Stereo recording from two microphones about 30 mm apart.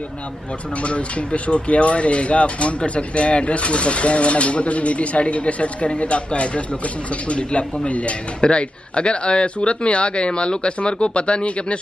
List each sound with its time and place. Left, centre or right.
0.8 s a man's voice: left
8.4 s a man's voice: left